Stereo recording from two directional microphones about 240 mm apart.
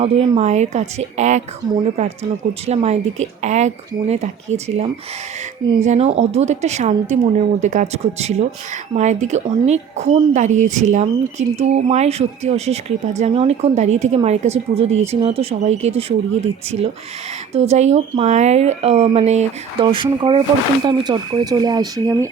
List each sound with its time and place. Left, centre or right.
0.0 s a woman's voice: right